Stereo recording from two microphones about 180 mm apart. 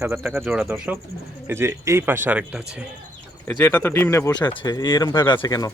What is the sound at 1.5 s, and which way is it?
Speech, 15° right (ahead or behind).